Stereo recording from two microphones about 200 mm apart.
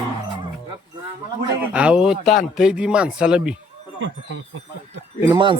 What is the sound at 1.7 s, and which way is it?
Speech, 5° right (ahead or behind).